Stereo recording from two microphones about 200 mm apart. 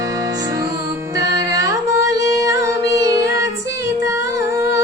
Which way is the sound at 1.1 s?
15° right (ahead or behind).